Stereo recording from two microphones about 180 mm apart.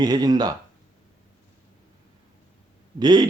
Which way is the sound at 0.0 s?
20° right (ahead or behind).